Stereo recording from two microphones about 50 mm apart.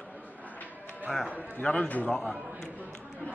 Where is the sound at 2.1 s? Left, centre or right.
Centre.